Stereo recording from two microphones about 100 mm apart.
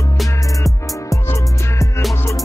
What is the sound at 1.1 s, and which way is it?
Music, 30° left (ahead or behind).